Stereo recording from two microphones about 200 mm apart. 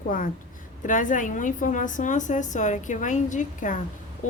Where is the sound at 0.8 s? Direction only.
40° left (ahead or behind).